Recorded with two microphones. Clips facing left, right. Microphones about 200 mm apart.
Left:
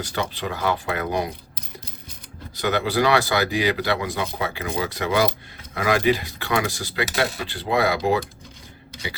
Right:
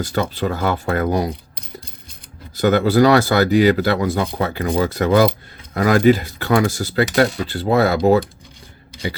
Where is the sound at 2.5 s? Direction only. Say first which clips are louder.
Right 8 dB; 45° right (ahead or behind).